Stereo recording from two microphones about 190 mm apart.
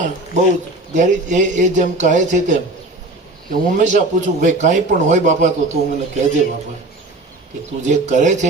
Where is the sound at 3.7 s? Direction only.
40° right (ahead or behind).